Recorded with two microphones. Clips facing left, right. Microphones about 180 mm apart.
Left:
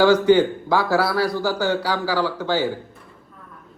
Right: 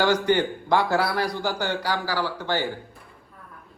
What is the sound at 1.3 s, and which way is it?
Speech, 15° right (ahead or behind).